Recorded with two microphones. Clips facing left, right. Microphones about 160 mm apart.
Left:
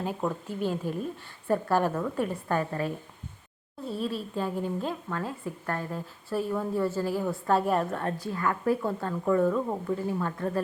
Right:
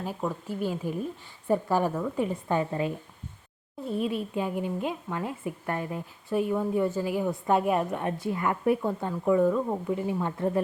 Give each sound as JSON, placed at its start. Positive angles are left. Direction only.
{"t": 0.2, "sound": "a woman's voice", "side_deg": -10}
{"t": 4.4, "sound": "a woman's voice", "side_deg": -15}